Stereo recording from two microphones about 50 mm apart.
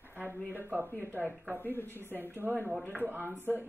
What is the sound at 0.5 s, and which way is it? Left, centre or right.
Speech, right.